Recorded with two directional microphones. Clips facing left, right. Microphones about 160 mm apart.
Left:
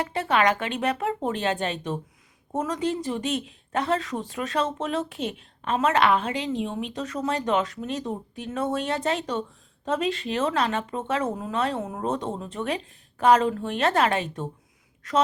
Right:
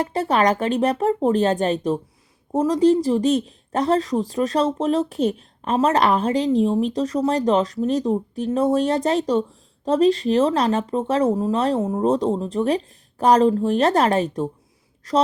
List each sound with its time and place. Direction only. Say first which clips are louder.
0.0 s a woman's voice: right 4 dB; 40° right (ahead or behind)